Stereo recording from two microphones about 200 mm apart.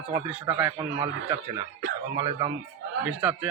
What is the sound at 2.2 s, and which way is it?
Speech, 30° right (ahead or behind).